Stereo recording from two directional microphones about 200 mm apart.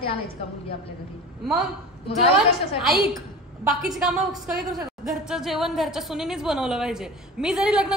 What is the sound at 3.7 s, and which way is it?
A woman's voice, centre (ahead or behind).